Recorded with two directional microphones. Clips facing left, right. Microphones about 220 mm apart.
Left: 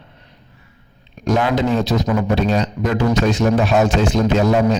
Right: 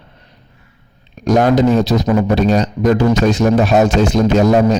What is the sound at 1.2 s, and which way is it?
A man's voice, 40° right (ahead or behind).